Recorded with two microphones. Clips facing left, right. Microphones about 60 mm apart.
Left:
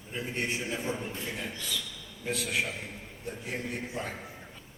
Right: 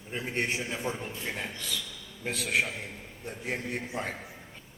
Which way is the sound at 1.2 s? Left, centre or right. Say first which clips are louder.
Right 1 dB; right.